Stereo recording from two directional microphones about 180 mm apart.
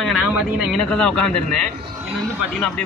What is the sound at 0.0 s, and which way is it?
A man's voice, 5° right (ahead or behind).